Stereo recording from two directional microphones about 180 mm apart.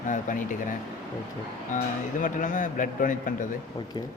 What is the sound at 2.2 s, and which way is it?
A man's voice, 45° left (ahead or behind).